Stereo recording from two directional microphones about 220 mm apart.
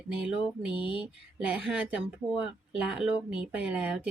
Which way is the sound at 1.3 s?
5° right (ahead or behind).